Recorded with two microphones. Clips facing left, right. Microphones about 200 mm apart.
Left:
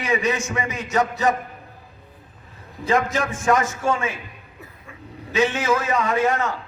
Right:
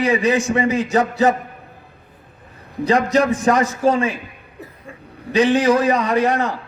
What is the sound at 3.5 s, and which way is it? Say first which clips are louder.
Speech: right 4 dB; 30° right (ahead or behind).